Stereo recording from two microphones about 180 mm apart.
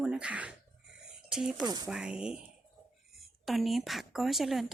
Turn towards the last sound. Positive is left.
turn(degrees=0)  # may be behind; listen again after turning